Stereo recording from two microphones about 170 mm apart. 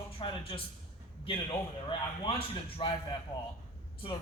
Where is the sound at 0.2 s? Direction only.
30° left (ahead or behind).